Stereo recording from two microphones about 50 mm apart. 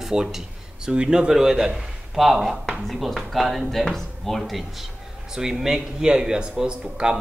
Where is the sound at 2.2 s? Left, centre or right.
Centre.